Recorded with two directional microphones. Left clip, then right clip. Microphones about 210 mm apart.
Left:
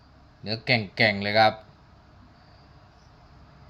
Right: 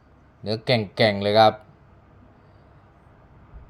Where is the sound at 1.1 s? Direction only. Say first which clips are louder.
Right 6 dB; 25° right (ahead or behind).